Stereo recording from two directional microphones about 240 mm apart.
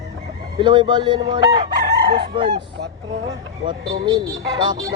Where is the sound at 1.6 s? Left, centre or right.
Right.